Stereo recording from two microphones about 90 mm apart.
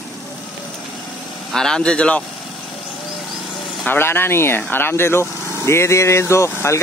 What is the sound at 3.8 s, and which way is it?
A man's voice, 25° left (ahead or behind).